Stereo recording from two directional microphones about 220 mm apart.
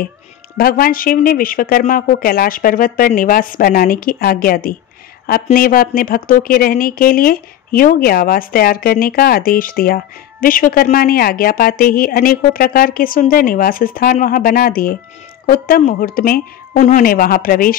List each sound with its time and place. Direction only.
0.6 s speech: 40° left (ahead or behind)